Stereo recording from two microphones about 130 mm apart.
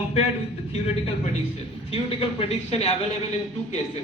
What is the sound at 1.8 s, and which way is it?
A man's voice, 45° left (ahead or behind).